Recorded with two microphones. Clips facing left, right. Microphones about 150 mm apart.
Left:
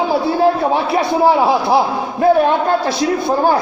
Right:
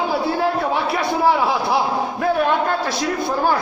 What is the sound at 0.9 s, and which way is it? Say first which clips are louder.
Speech: left 5 dB; 30° left (ahead or behind).